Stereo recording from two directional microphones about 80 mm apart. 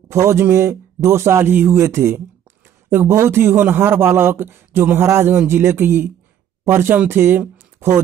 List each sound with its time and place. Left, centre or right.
0.1 s a man's voice: right